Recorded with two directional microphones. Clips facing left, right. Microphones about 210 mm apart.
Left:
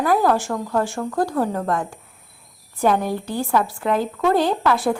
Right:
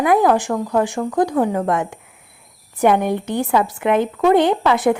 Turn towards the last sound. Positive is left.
turn(degrees=-20)  # may be behind; listen again after turning